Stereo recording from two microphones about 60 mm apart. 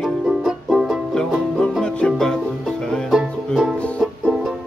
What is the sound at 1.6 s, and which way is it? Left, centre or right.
Music, centre.